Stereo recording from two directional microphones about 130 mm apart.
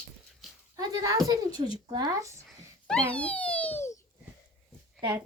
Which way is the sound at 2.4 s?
10° left (ahead or behind).